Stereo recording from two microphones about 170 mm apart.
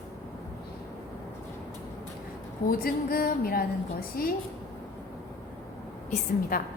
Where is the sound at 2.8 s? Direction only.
60° left (ahead or behind).